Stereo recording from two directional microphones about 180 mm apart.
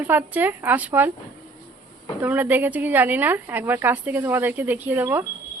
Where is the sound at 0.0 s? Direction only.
10° right (ahead or behind).